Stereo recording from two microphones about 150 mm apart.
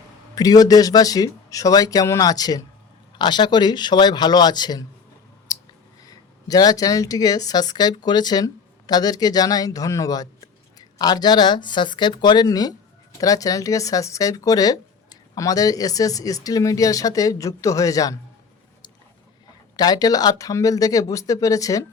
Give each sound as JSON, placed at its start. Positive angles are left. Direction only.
{"t": 0.3, "sound": "speech", "side_deg": 25}
{"t": 6.1, "sound": "speech", "side_deg": 25}
{"t": 19.7, "sound": "speech", "side_deg": 25}